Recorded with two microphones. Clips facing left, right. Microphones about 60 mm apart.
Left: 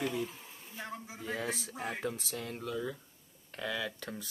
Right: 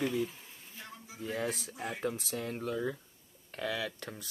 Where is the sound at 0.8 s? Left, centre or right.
Left.